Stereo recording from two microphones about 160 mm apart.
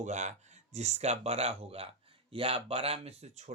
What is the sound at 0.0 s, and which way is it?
A man's voice, 50° right (ahead or behind).